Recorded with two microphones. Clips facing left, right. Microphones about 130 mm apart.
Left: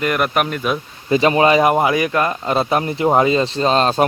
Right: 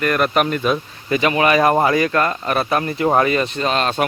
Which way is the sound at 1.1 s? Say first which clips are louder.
Left 3 dB; 30° left (ahead or behind).